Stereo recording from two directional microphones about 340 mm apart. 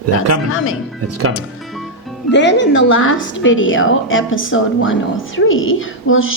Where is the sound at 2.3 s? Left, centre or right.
Left.